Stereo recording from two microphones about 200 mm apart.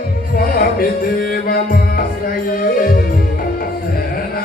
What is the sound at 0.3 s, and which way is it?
Music, 45° left (ahead or behind).